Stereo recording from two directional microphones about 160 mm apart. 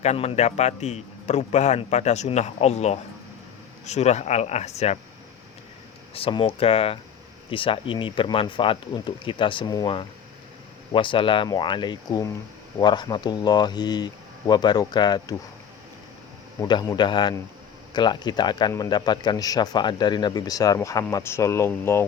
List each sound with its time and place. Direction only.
0.0 s a man's voice: 40° left (ahead or behind)
6.1 s speech: 35° left (ahead or behind)
16.6 s speech: 25° left (ahead or behind)